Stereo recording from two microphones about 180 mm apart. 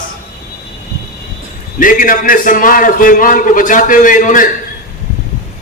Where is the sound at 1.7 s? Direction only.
50° left (ahead or behind).